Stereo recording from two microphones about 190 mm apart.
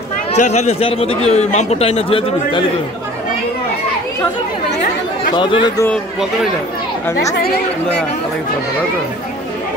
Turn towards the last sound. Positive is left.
turn(degrees=65)  # may be behind; listen again after turning